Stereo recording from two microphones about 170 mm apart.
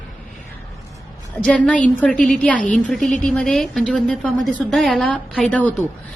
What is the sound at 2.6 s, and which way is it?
Speech, 50° left (ahead or behind).